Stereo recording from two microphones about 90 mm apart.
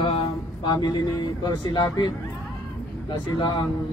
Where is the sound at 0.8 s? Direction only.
50° left (ahead or behind).